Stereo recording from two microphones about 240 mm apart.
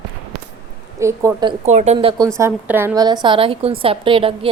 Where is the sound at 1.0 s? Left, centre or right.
Centre.